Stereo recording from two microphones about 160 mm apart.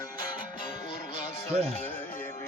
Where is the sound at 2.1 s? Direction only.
50° left (ahead or behind).